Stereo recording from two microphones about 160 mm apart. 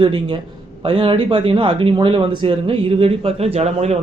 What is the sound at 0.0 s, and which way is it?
Speech, 30° right (ahead or behind).